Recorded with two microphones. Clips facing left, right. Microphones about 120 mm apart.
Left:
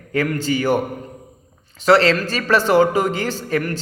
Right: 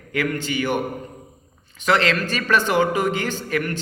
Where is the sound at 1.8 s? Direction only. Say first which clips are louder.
Left 5 dB; 35° left (ahead or behind).